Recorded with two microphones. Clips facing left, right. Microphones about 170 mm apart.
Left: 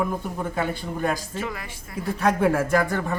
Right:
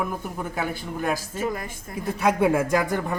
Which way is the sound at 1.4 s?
45° right (ahead or behind).